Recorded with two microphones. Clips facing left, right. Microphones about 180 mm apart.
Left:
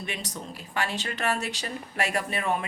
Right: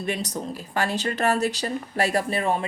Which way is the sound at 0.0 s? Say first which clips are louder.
Right 8 dB; 40° right (ahead or behind).